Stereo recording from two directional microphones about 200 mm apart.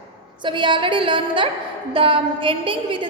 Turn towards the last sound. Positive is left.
turn(degrees=-25)  # may be behind; listen again after turning